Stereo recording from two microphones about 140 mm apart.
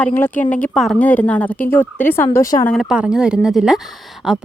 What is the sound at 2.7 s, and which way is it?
Speech, centre (ahead or behind).